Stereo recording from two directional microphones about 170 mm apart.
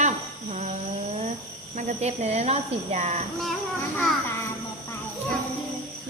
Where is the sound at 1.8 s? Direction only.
40° right (ahead or behind).